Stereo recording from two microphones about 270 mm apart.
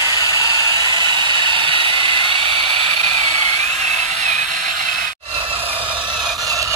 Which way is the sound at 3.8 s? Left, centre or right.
Right.